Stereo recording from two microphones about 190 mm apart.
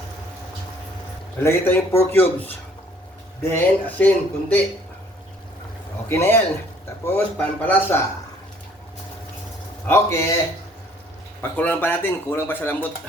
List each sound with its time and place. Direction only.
1.4 s speech: 10° left (ahead or behind)
3.5 s speech: 10° left (ahead or behind)
6.1 s speech: 15° left (ahead or behind)
9.8 s speech: 15° left (ahead or behind)
11.5 s speech: 10° left (ahead or behind)